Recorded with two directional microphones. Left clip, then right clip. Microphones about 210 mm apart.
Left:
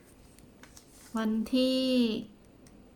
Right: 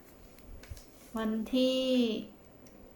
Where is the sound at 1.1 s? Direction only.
20° left (ahead or behind).